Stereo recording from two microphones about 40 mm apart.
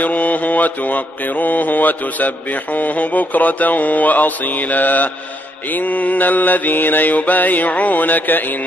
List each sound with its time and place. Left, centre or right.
0.0 s mantra: left